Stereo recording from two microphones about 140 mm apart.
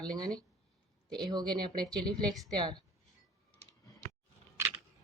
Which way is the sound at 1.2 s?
30° right (ahead or behind).